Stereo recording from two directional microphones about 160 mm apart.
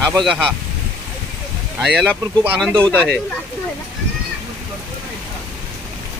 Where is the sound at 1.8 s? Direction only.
Centre (ahead or behind).